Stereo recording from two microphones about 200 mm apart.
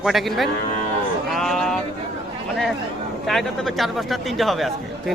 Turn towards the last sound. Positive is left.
turn(degrees=0)  # may be behind; listen again after turning